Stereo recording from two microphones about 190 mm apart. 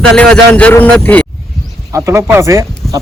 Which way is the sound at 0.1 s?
5° left (ahead or behind).